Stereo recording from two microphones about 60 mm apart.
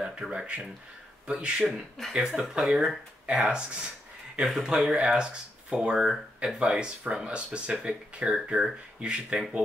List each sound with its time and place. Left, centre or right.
0.0 s speech: centre
1.7 s speech: centre
3.3 s speech: centre